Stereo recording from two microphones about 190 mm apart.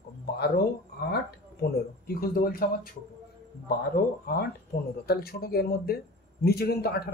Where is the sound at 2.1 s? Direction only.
50° left (ahead or behind).